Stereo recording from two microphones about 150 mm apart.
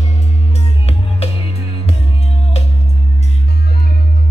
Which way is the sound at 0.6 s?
45° left (ahead or behind).